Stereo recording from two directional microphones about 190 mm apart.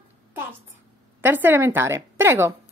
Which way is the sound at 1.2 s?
10° right (ahead or behind).